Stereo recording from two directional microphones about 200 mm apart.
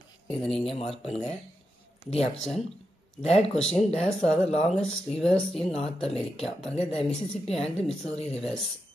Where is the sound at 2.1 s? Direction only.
30° left (ahead or behind).